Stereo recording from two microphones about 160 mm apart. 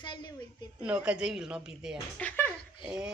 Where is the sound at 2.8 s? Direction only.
5° right (ahead or behind).